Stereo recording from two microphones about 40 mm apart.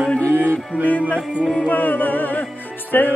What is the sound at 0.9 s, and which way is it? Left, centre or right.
Music, left.